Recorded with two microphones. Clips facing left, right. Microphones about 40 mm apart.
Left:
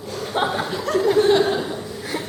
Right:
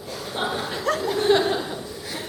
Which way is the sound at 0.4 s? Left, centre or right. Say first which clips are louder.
Right 3 dB; centre.